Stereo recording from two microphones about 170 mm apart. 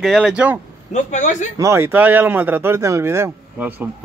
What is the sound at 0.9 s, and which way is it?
Speech, 45° left (ahead or behind).